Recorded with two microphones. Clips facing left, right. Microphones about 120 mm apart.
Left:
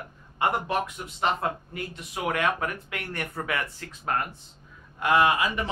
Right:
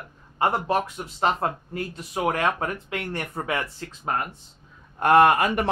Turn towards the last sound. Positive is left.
turn(degrees=-55)  # may be behind; listen again after turning